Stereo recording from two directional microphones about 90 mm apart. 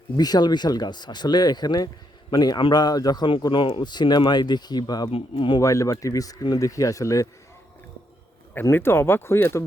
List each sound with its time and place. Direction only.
0.2 s speech: 50° left (ahead or behind)
3.4 s speech: 65° left (ahead or behind); by 5.1 s 45° left (ahead or behind)
5.1 s a man's voice: 60° left (ahead or behind)
5.5 s speech: 35° left (ahead or behind)
8.7 s speech: 25° left (ahead or behind)